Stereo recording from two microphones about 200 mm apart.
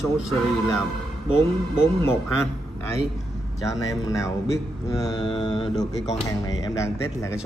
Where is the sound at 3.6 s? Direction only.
15° left (ahead or behind).